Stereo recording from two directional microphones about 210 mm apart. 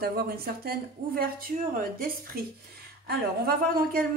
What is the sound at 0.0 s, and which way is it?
Speech, 45° right (ahead or behind).